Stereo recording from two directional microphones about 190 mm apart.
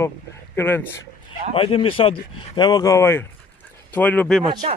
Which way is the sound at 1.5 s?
30° left (ahead or behind).